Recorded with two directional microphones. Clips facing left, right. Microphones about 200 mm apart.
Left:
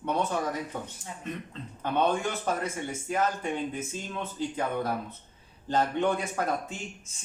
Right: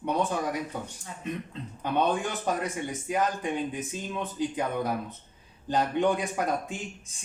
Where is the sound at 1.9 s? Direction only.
15° right (ahead or behind).